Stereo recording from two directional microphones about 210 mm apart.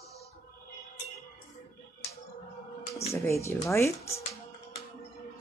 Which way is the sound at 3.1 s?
15° left (ahead or behind).